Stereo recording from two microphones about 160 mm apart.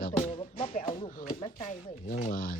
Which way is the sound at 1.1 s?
60° left (ahead or behind).